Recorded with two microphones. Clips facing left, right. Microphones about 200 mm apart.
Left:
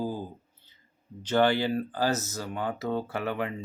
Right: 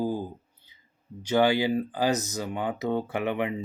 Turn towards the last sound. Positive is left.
turn(degrees=-20)  # may be behind; listen again after turning